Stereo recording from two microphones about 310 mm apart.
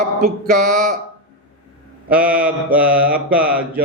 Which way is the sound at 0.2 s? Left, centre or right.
Right.